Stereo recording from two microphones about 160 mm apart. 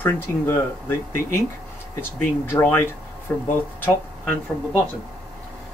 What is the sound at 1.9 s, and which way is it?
Speech, 15° left (ahead or behind).